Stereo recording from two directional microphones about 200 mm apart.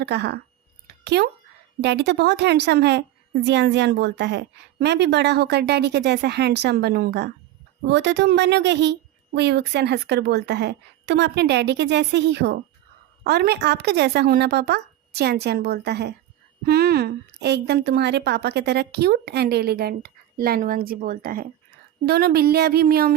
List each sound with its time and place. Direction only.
0.0 s a woman's voice: 55° right (ahead or behind)